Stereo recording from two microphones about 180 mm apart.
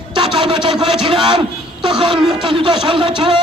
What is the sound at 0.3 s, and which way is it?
A man's voice, 30° right (ahead or behind).